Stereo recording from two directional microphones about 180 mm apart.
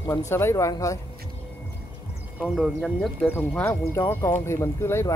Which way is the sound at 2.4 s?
Centre (ahead or behind).